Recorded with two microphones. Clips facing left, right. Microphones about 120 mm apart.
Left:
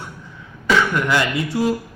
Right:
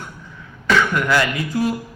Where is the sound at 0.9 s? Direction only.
20° left (ahead or behind).